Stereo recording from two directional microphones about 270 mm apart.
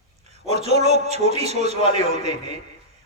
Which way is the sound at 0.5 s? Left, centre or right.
Right.